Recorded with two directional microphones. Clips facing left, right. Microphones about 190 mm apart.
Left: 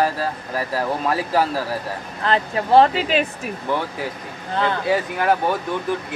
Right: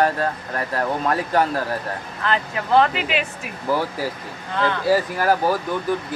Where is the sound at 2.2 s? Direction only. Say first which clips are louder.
Left 3 dB; 35° left (ahead or behind).